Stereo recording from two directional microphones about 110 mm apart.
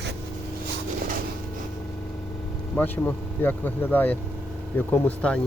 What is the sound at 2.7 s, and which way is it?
Speech, 15° left (ahead or behind).